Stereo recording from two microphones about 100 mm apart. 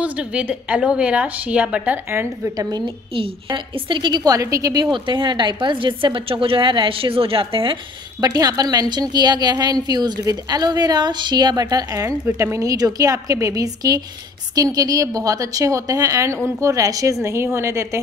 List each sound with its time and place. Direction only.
0.0 s a woman's voice: 10° right (ahead or behind)
2.0 s a woman's voice: 25° right (ahead or behind)
2.5 s a woman's voice: 40° right (ahead or behind)
2.8 s a woman's voice: 55° right (ahead or behind); by 4.8 s 35° right (ahead or behind)
4.9 s a woman's voice: 50° right (ahead or behind)
8.2 s a woman's voice: 40° right (ahead or behind)
11.6 s a woman's voice: 35° right (ahead or behind)